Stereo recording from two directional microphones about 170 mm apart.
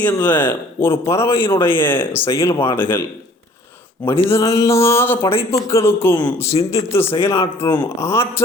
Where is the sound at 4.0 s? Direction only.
15° left (ahead or behind).